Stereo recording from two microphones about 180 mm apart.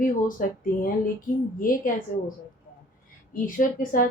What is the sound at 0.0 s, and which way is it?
A woman's voice, 50° left (ahead or behind).